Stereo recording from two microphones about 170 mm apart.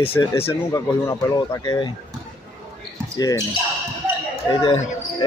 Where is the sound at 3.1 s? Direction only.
20° left (ahead or behind).